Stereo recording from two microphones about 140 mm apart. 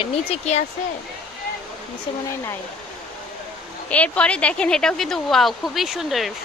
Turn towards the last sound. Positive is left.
turn(degrees=0)  # may be behind; listen again after turning